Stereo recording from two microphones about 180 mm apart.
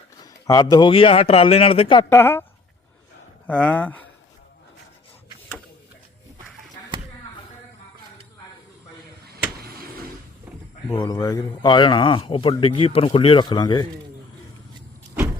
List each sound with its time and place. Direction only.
0.2 s speech: 20° left (ahead or behind)
2.0 s speech: 15° left (ahead or behind)
3.4 s speech: 5° left (ahead or behind)
10.8 s speech: 20° left (ahead or behind)